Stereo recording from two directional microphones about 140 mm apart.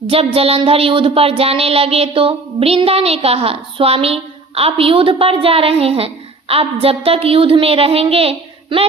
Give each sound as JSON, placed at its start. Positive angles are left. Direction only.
{"t": 0.1, "sound": "speech", "side_deg": -45}